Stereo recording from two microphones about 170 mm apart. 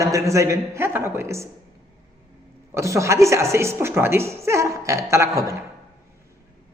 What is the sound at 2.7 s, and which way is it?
A man's voice, 15° right (ahead or behind).